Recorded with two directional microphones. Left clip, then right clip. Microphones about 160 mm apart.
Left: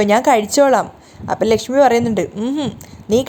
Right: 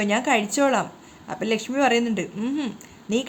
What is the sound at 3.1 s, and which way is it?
Speech, 35° left (ahead or behind).